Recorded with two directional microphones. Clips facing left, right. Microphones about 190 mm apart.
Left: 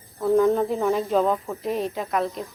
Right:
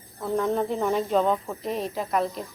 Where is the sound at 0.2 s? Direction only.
Centre (ahead or behind).